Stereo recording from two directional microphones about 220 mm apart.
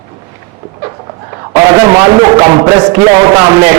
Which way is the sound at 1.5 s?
15° right (ahead or behind).